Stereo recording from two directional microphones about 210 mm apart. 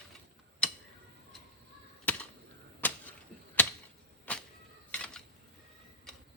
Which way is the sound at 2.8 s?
10° left (ahead or behind).